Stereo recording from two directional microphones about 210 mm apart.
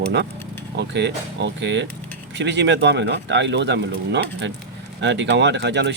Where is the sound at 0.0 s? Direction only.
55° right (ahead or behind).